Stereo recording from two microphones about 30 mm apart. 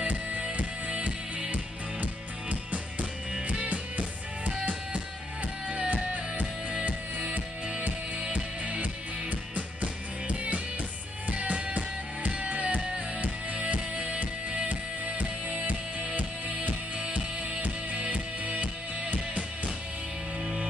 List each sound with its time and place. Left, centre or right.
0.0 s music: right
2.5 s music: right
5.7 s music: right
9.6 s music: right
13.9 s music: right
14.7 s music: right
17.1 s music: right